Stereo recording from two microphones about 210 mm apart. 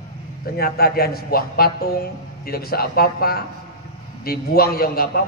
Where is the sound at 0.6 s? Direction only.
45° left (ahead or behind).